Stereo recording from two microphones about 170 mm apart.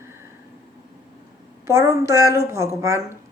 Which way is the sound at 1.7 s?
15° right (ahead or behind).